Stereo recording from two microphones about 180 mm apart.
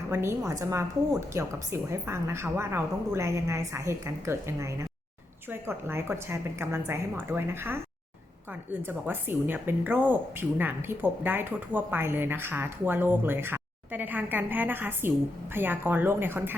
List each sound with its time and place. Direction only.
0.1 s speech: 15° right (ahead or behind)
8.9 s speech: 10° right (ahead or behind)